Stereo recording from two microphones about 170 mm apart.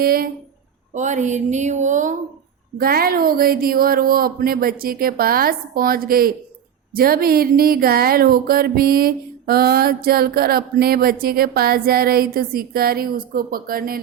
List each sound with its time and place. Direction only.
0.0 s speech: 60° right (ahead or behind)
0.9 s speech: 45° right (ahead or behind)
2.7 s speech: 60° right (ahead or behind)